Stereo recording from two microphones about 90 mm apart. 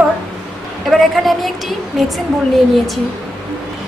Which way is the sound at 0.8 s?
Centre (ahead or behind).